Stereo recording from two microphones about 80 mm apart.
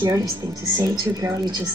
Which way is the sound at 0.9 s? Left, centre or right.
Right.